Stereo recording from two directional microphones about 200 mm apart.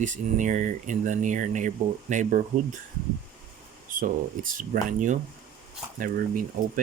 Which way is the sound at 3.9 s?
40° right (ahead or behind).